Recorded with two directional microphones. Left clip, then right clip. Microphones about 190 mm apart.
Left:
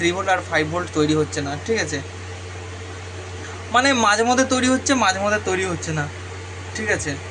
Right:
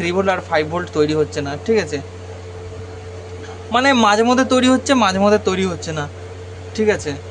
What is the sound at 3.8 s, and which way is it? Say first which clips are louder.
Speech: right 4 dB; 90° right.